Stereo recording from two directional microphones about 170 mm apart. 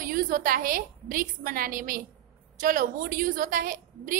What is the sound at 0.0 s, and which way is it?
A woman's voice, 55° right (ahead or behind).